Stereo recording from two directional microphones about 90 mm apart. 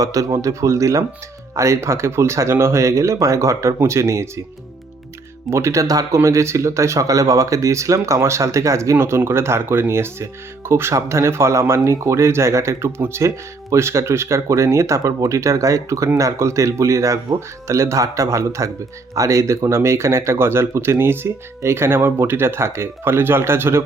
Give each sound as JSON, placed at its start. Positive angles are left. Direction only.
{"t": 0.0, "sound": "speech", "side_deg": -40}
{"t": 5.5, "sound": "speech", "side_deg": -30}